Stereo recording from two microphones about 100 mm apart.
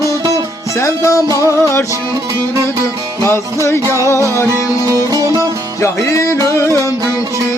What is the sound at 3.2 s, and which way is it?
Music, 30° left (ahead or behind).